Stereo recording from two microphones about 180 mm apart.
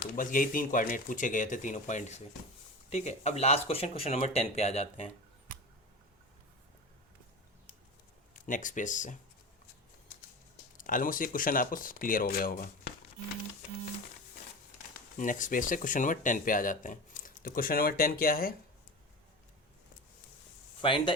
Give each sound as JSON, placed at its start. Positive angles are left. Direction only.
{"t": 0.0, "sound": "speech", "side_deg": 50}
{"t": 8.3, "sound": "speech", "side_deg": 45}
{"t": 10.8, "sound": "speech", "side_deg": 50}
{"t": 15.2, "sound": "speech", "side_deg": 45}
{"t": 20.8, "sound": "speech", "side_deg": 25}